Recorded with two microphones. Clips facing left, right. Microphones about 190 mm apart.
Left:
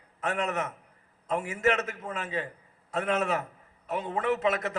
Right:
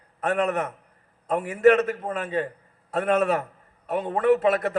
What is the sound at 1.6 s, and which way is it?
A man's voice, 40° right (ahead or behind).